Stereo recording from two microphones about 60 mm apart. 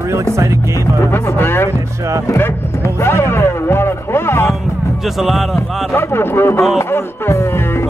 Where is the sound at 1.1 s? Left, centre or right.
Left.